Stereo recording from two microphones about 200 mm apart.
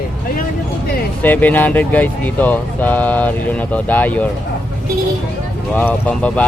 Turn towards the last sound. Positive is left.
turn(degrees=5)  # may be behind; listen again after turning